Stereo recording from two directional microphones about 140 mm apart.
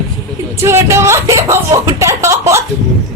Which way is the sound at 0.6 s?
20° right (ahead or behind).